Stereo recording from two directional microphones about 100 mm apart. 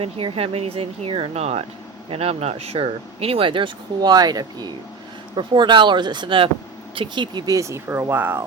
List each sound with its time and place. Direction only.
0.0 s speech: 70° right (ahead or behind)
4.1 s speech: 40° right (ahead or behind)
7.5 s speech: 30° right (ahead or behind)